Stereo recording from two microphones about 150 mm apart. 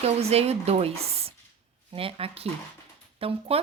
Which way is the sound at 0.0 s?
45° right (ahead or behind).